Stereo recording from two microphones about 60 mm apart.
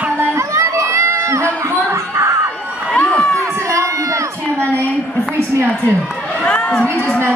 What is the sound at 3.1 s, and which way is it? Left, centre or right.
Crowd, centre.